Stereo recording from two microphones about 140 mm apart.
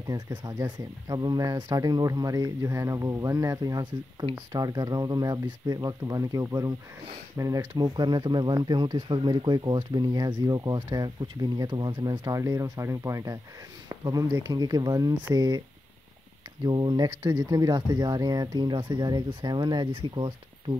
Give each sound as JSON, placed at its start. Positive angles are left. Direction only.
{"t": 0.0, "sound": "speech", "side_deg": -30}
{"t": 16.6, "sound": "speech", "side_deg": -30}